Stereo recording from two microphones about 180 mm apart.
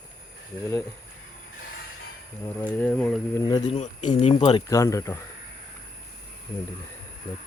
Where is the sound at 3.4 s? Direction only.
25° left (ahead or behind).